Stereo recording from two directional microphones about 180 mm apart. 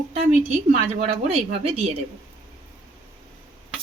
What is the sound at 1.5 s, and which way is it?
Speech, 35° right (ahead or behind).